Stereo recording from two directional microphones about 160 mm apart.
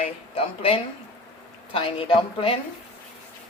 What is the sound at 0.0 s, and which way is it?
A woman's voice, 35° left (ahead or behind).